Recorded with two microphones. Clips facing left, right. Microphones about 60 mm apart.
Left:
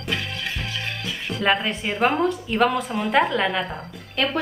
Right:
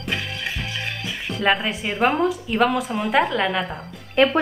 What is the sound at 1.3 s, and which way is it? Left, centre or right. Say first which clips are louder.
A woman's voice: right 1 dB; centre.